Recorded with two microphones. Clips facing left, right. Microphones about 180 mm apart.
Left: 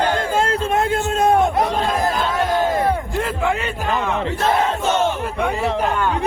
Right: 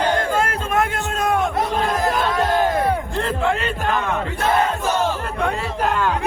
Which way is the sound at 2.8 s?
5° left (ahead or behind).